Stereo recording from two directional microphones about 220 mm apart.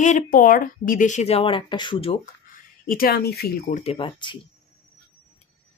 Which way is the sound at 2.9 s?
40° left (ahead or behind).